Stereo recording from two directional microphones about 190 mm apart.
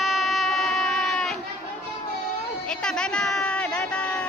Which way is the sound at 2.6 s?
5° left (ahead or behind).